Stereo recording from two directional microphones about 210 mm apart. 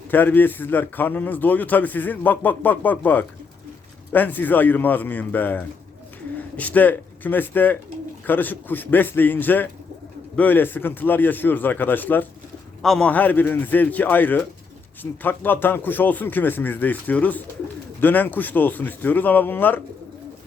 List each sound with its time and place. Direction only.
0.1 s a man's voice: 10° left (ahead or behind)